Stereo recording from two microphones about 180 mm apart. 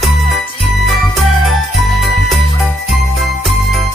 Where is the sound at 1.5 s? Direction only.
Centre (ahead or behind).